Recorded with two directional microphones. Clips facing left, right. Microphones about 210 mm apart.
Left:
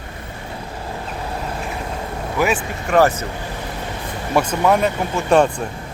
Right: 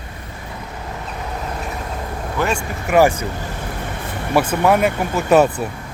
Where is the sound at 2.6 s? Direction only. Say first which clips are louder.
Right 4 dB; 10° right (ahead or behind).